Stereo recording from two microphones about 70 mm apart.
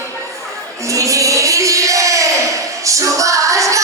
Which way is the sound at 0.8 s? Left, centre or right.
Right.